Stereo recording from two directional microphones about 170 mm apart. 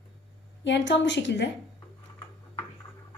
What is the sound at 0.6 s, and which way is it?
Speech, 90° left.